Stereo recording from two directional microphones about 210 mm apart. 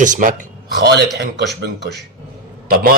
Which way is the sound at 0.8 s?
55° right (ahead or behind).